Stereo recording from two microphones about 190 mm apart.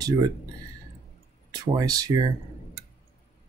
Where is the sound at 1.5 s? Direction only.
20° right (ahead or behind).